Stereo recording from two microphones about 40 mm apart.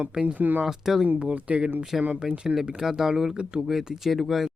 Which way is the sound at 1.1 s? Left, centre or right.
Right.